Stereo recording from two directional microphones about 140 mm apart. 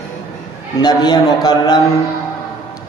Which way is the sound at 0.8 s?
30° left (ahead or behind).